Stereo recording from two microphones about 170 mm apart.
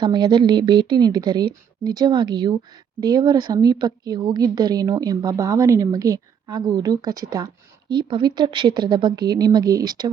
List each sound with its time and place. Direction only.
0.0 s a woman's voice: 25° right (ahead or behind)